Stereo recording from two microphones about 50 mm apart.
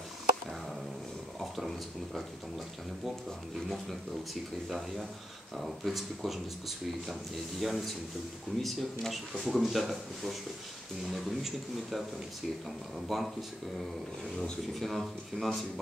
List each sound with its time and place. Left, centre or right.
3.5 s speech: centre
7.6 s speech: centre
13.1 s speech: centre